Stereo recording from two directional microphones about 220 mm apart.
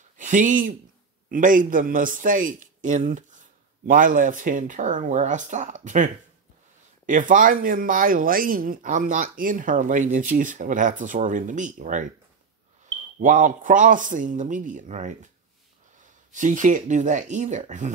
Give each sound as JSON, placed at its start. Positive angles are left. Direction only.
{"t": 0.2, "sound": "a man's voice", "side_deg": -35}
{"t": 7.1, "sound": "a man's voice", "side_deg": -35}
{"t": 13.2, "sound": "a man's voice", "side_deg": -35}
{"t": 16.3, "sound": "a man's voice", "side_deg": -35}